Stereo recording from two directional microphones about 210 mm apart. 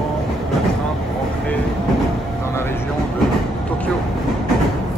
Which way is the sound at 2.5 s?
10° left (ahead or behind).